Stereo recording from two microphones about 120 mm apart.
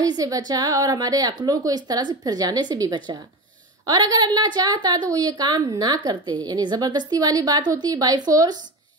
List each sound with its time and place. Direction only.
0.0 s a woman's voice: 30° right (ahead or behind)